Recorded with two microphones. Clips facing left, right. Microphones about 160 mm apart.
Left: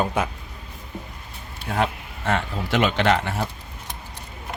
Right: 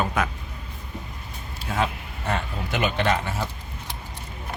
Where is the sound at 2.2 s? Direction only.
90° left; by 3.4 s 70° left (ahead or behind).